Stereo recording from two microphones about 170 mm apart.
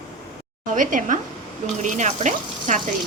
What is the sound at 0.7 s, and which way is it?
Speech, 50° right (ahead or behind).